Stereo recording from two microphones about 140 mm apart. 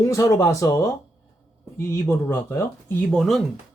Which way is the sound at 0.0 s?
20° left (ahead or behind).